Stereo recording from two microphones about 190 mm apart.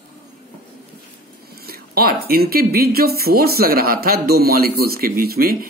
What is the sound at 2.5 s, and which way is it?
Speech, 55° right (ahead or behind).